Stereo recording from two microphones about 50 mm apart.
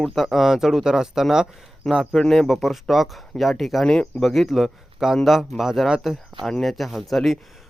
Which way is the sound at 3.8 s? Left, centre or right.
Centre.